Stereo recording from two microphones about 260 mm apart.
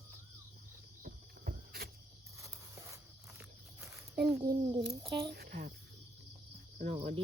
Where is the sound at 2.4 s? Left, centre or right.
Centre.